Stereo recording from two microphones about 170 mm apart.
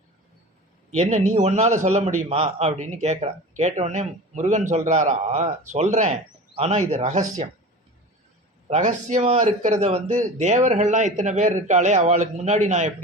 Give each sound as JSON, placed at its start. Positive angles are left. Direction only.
{"t": 0.9, "sound": "a man's voice", "side_deg": -40}
{"t": 8.7, "sound": "a man's voice", "side_deg": -45}